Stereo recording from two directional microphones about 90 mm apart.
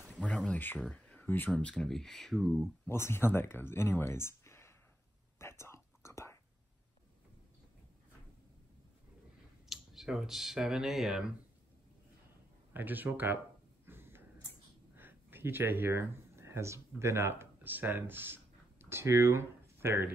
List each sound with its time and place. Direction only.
0.2 s a sound: 15° left (ahead or behind)
0.7 s speech: 10° left (ahead or behind)
1.5 s speech: 10° left (ahead or behind)
2.9 s speech: 25° left (ahead or behind)
5.4 s whispering: 30° left (ahead or behind)
9.7 s speech: 5° right (ahead or behind)
12.7 s speech: 20° right (ahead or behind)
13.8 s mechanisms: 25° right (ahead or behind)
15.0 s speech: 25° right (ahead or behind)